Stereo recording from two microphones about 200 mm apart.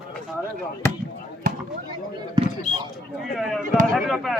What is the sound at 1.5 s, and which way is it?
Basketball bounce, 45° right (ahead or behind).